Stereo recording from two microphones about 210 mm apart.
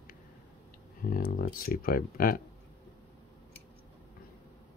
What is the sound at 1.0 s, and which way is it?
Speech, 45° left (ahead or behind).